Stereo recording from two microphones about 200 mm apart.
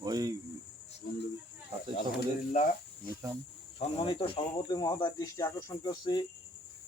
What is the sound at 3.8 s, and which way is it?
Speech, 25° left (ahead or behind).